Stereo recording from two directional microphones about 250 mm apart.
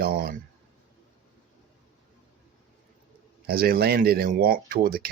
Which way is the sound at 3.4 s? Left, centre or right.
Right.